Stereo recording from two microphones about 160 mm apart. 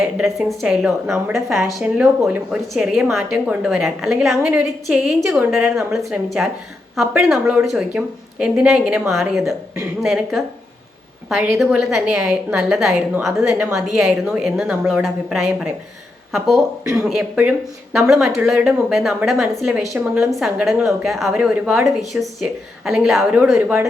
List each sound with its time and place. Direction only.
0.2 s speech: centre (ahead or behind)
16.8 s speech: 15° right (ahead or behind)
17.1 s speech: 5° right (ahead or behind)